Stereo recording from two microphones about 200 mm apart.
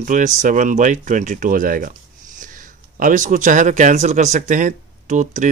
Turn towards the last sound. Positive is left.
turn(degrees=-40)  # may be behind; listen again after turning